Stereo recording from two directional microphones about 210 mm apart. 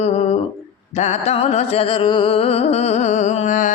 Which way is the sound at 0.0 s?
30° left (ahead or behind).